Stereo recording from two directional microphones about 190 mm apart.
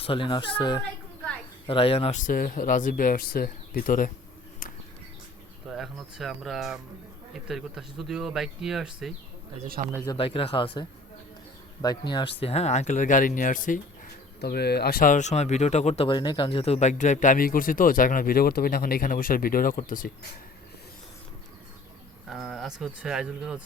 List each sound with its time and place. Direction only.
0.0 s speech: 30° left (ahead or behind); by 4.1 s 45° left (ahead or behind)
5.6 s speech: centre (ahead or behind)
10.1 s speech: 30° left (ahead or behind); by 13.7 s 45° left (ahead or behind)
14.4 s speech: 60° left (ahead or behind)
22.3 s speech: centre (ahead or behind)